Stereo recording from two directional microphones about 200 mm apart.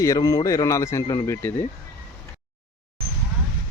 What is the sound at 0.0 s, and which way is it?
Speech, 15° left (ahead or behind).